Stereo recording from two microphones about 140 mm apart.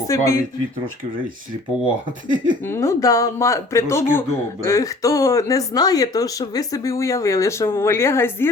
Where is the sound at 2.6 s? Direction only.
15° left (ahead or behind).